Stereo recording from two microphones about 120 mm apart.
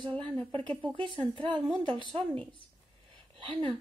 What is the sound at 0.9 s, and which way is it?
Speech, 45° right (ahead or behind).